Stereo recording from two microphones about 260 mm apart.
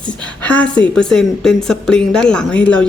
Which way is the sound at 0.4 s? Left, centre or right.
Centre.